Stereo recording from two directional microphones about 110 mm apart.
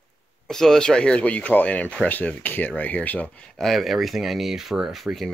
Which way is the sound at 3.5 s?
Centre (ahead or behind).